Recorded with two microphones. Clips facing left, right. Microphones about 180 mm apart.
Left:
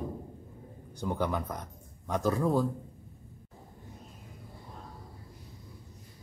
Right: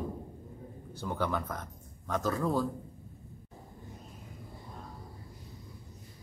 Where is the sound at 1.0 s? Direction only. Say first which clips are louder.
Left 2 dB; 15° left (ahead or behind).